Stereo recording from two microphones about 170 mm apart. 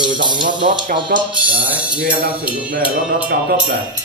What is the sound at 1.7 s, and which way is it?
Speech, 5° right (ahead or behind).